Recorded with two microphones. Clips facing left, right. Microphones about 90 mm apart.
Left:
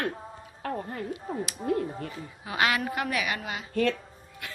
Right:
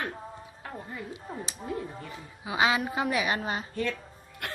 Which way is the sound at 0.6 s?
60° left (ahead or behind).